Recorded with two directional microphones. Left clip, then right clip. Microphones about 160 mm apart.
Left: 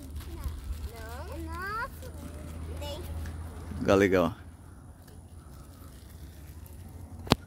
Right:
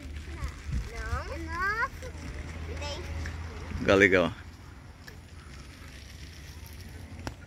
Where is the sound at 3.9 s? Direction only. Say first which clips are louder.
Right 2 dB; 20° left (ahead or behind).